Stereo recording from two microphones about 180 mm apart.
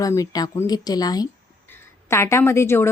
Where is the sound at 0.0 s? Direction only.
20° left (ahead or behind).